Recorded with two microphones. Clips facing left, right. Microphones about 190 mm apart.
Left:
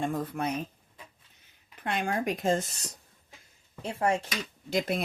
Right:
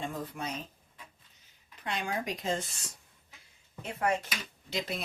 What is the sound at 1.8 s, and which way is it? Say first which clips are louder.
Speech: left 5 dB; 55° left (ahead or behind).